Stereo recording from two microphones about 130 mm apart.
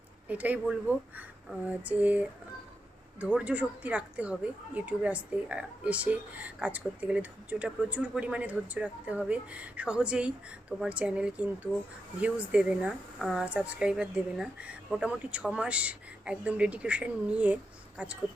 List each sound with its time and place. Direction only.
0.3 s speech: 10° right (ahead or behind)